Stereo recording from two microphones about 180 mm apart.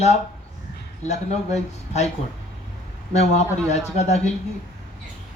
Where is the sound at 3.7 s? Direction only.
40° left (ahead or behind).